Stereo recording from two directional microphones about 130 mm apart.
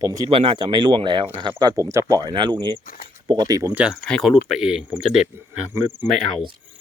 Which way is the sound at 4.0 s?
5° left (ahead or behind).